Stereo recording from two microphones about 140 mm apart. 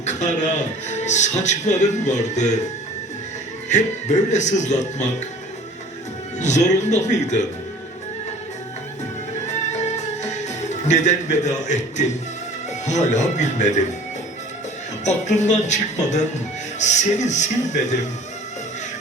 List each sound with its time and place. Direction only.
0.0 s speech: 60° left (ahead or behind)
3.7 s speech: 60° left (ahead or behind)
6.4 s speech: 55° left (ahead or behind)
9.5 s music: 55° left (ahead or behind)
12.8 s speech: 55° left (ahead or behind)
15.0 s speech: 55° left (ahead or behind)